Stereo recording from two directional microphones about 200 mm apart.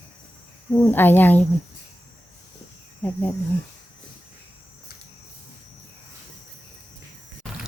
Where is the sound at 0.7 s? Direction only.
10° left (ahead or behind).